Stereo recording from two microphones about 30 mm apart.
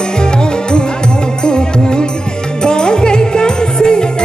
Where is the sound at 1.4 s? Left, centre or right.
Left.